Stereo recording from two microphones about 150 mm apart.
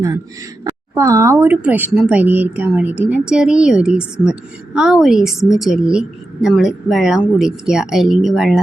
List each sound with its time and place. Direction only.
0.6 s speech: 20° right (ahead or behind); by 8.6 s 5° right (ahead or behind)